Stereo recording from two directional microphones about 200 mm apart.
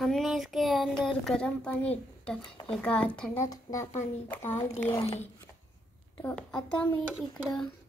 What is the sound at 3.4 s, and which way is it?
Speech, 15° left (ahead or behind).